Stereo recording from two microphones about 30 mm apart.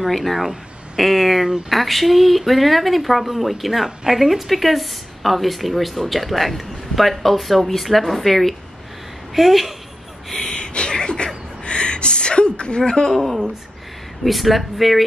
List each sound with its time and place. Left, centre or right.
0.1 s speech: centre
10.3 s a sound: left
11.6 s gasp: left
13.1 s speech: centre